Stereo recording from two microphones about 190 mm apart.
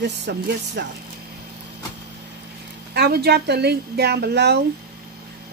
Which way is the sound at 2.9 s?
55° right (ahead or behind).